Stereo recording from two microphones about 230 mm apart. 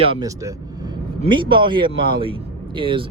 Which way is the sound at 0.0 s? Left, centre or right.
Centre.